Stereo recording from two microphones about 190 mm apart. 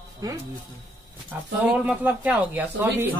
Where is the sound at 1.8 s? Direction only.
10° right (ahead or behind).